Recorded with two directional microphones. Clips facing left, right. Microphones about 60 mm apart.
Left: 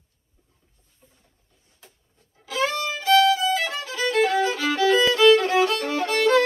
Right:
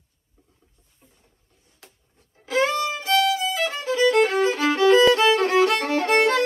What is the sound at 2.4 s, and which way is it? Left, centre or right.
Music, right.